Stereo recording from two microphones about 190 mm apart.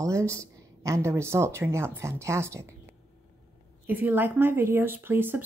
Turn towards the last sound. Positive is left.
turn(degrees=-10)  # may be behind; listen again after turning